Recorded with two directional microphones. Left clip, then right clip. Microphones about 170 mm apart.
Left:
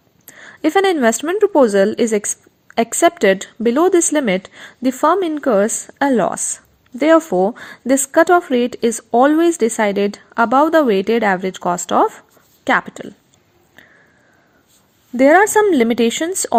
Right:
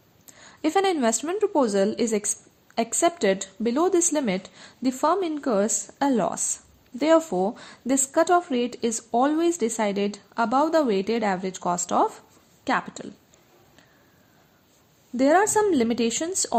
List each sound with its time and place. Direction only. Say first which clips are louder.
0.3 s a woman's voice: left 8 dB; 35° left (ahead or behind)
15.1 s a woman's voice: left 9 dB; 35° left (ahead or behind)